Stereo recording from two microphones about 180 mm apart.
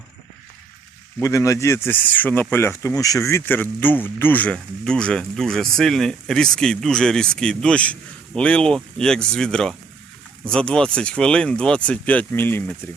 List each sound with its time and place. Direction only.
1.2 s speech: 15° left (ahead or behind)